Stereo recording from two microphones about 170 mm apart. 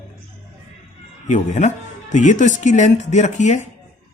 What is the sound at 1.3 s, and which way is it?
A man's voice, 45° left (ahead or behind).